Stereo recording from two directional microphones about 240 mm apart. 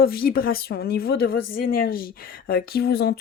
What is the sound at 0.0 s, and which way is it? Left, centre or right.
Speech, left.